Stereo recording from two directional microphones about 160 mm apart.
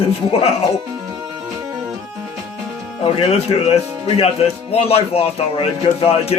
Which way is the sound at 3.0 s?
35° left (ahead or behind).